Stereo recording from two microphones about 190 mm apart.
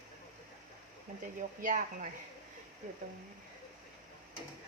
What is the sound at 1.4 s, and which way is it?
Speech, 45° right (ahead or behind).